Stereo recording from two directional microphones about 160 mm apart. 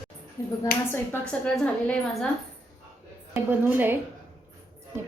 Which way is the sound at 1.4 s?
5° left (ahead or behind).